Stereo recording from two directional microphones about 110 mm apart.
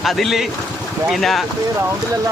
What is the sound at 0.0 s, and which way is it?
Speech, centre (ahead or behind).